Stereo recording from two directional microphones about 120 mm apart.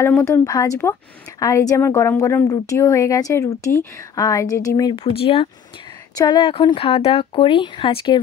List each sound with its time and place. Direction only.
0.0 s a woman's voice: 20° left (ahead or behind)
4.9 s speech: 50° left (ahead or behind)
6.1 s speech: 35° left (ahead or behind)